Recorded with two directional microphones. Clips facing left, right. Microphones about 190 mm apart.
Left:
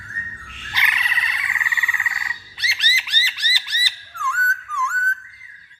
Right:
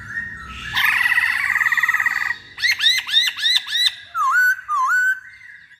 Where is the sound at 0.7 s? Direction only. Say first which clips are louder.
Even; 20° left (ahead or behind).